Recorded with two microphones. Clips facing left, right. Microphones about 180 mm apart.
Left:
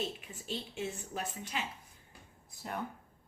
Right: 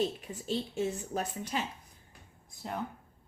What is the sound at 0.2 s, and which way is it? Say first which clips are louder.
Speech: right 7 dB; 40° right (ahead or behind).